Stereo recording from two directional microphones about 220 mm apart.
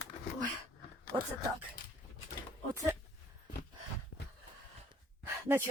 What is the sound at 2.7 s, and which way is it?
Speech, 15° right (ahead or behind).